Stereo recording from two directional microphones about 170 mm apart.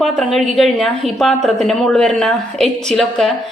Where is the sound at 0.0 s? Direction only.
Centre (ahead or behind).